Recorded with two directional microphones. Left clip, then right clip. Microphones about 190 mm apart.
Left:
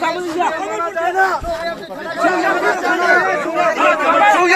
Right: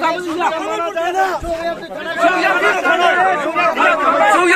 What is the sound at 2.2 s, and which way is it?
Chatter, 55° right (ahead or behind).